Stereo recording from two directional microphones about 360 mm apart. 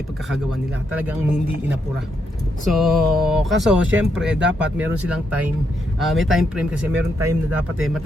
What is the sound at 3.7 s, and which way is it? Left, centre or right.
Speech, right.